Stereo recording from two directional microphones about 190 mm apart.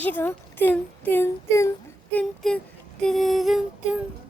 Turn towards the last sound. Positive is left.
turn(degrees=0)  # may be behind; listen again after turning